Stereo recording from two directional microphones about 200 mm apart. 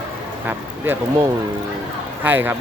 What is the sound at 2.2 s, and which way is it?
Speech, 10° right (ahead or behind).